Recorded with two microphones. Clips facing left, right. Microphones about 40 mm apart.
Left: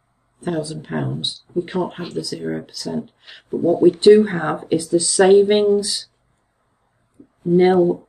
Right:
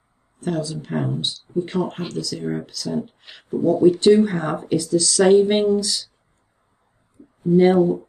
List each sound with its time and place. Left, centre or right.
0.4 s speech: centre
7.2 s a sound: centre
7.5 s speech: centre